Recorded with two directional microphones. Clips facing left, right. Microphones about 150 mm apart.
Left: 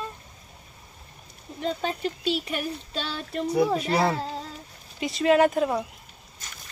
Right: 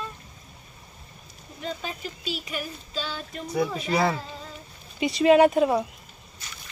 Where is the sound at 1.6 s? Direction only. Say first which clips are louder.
Left 6 dB; 65° left (ahead or behind).